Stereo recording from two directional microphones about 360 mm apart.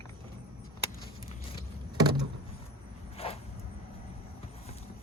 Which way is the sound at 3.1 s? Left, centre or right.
Centre.